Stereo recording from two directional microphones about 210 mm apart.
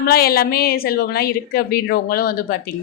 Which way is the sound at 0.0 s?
45° left (ahead or behind).